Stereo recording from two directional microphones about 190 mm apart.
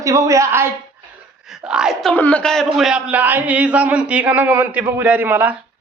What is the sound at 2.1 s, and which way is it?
A woman's voice, 5° left (ahead or behind).